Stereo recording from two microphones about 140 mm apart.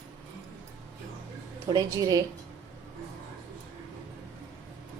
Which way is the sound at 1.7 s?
30° right (ahead or behind).